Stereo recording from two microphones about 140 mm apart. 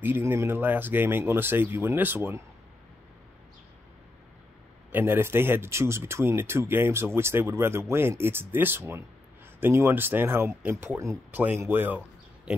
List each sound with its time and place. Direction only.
0.0 s speech: 15° right (ahead or behind)
4.9 s speech: 15° right (ahead or behind)
12.5 s a sound: 5° right (ahead or behind)